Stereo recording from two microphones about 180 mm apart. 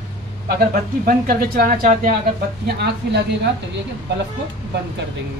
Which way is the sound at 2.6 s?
65° right (ahead or behind).